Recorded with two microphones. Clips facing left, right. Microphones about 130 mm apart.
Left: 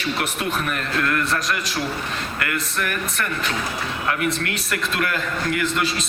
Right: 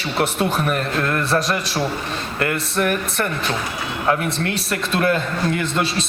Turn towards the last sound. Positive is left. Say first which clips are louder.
# right 1 dB
turn(degrees=-30)  # may be behind; listen again after turning